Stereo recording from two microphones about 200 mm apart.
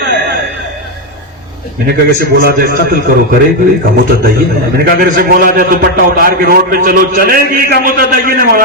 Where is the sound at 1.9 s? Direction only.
50° right (ahead or behind).